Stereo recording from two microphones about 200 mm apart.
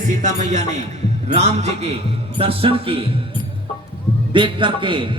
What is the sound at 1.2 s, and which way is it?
A man's voice, 35° right (ahead or behind).